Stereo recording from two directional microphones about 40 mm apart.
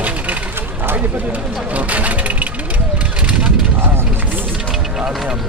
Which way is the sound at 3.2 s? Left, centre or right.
Right.